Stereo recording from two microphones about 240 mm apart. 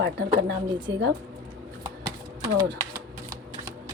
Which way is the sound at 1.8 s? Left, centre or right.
Centre.